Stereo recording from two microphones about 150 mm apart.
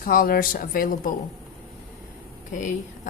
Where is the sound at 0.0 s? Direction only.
75° left (ahead or behind).